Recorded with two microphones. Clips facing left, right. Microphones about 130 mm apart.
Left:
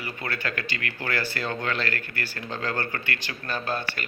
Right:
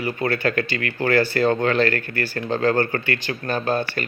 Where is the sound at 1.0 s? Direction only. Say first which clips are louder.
Right 12 dB; 55° right (ahead or behind).